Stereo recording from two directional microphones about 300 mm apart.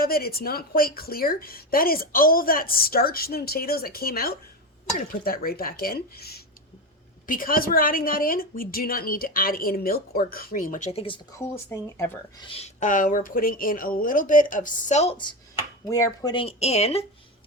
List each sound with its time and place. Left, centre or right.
0.0 s a woman's voice: left; by 12.5 s centre
12.5 s a woman's voice: left